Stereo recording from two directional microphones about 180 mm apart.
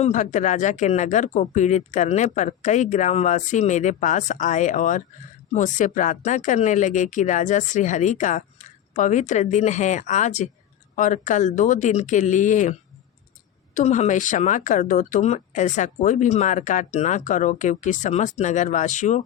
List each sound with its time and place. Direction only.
0.0 s speech: 45° left (ahead or behind)
13.7 s speech: 40° left (ahead or behind)